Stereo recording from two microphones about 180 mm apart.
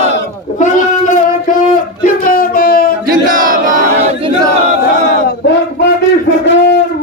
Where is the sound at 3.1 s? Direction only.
50° right (ahead or behind).